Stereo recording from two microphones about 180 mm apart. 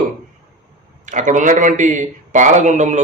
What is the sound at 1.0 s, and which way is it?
A man's voice, 45° right (ahead or behind).